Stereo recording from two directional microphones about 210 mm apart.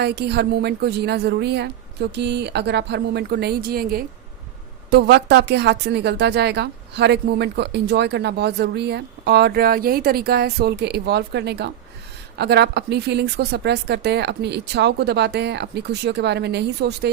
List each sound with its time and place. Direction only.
0.0 s speech: 50° right (ahead or behind)